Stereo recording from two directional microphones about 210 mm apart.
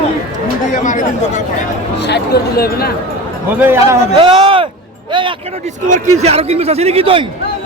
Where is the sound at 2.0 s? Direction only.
50° left (ahead or behind).